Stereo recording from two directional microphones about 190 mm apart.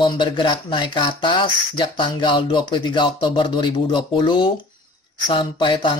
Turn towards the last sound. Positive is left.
turn(degrees=25)  # may be behind; listen again after turning